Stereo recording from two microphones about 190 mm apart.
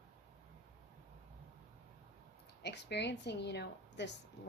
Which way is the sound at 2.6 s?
65° left (ahead or behind).